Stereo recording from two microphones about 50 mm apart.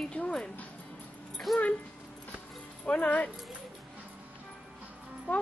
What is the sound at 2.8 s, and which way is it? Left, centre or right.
Speech, left.